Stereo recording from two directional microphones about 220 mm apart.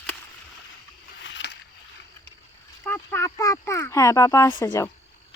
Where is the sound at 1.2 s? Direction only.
55° left (ahead or behind).